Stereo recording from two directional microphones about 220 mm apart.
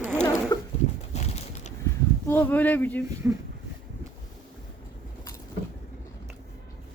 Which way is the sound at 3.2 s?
10° right (ahead or behind).